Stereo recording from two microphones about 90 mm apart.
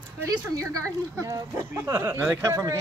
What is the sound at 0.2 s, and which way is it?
A woman's voice, 35° right (ahead or behind).